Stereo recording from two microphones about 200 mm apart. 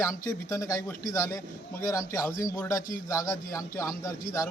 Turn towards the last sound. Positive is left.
turn(degrees=15)  # may be behind; listen again after turning